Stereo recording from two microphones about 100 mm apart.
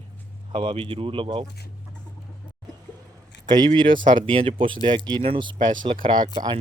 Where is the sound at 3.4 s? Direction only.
45° right (ahead or behind).